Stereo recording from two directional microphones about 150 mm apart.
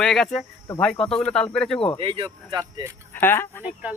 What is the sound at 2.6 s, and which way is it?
Speech, 25° right (ahead or behind).